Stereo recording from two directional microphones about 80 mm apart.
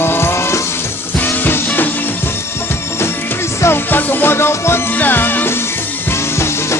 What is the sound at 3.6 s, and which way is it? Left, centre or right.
Music, left.